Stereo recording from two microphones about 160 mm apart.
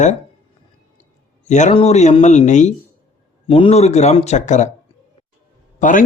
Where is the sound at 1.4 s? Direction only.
45° left (ahead or behind).